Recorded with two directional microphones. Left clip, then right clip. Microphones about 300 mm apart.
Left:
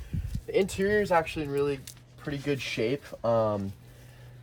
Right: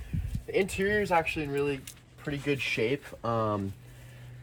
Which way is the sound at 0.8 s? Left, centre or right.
Centre.